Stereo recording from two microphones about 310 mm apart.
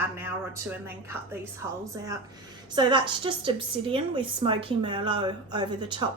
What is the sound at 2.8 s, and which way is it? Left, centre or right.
A woman's voice, centre.